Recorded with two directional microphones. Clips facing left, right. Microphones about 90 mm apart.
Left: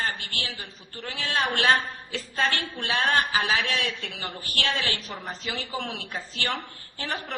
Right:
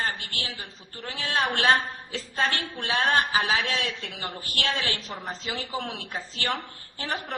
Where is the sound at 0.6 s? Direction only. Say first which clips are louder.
Even; 30° right (ahead or behind).